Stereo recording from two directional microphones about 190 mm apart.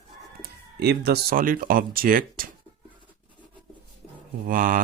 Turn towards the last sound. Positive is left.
turn(degrees=-45)  # may be behind; listen again after turning